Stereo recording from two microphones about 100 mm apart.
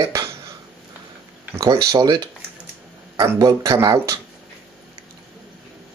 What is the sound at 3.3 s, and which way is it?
Speech, 35° right (ahead or behind).